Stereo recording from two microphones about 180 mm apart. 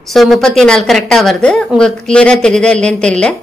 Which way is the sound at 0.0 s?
Centre (ahead or behind).